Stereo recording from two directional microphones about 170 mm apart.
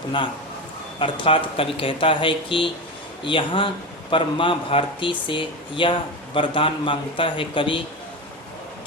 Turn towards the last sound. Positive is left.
turn(degrees=30)  # may be behind; listen again after turning